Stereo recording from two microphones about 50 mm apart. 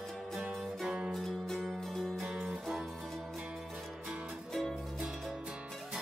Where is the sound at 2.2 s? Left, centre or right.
Centre.